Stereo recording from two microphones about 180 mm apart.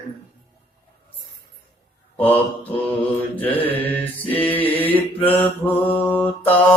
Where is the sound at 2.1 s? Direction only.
10° left (ahead or behind).